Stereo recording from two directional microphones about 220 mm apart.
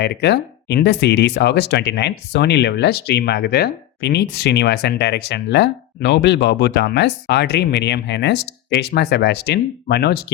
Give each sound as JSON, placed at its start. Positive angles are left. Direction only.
{"t": 0.0, "sound": "speech", "side_deg": 50}